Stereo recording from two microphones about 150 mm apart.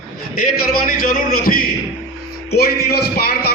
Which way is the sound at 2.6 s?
90° left.